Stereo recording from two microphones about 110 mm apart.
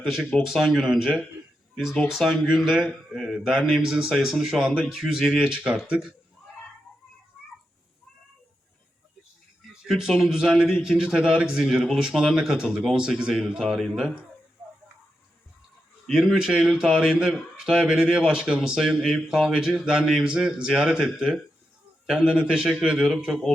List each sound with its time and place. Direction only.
0.0 s a man's voice: centre (ahead or behind)
9.8 s a man's voice: 5° right (ahead or behind)
16.0 s a man's voice: 5° right (ahead or behind)